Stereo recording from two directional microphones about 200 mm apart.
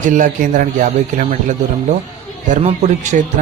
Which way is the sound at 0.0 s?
40° right (ahead or behind).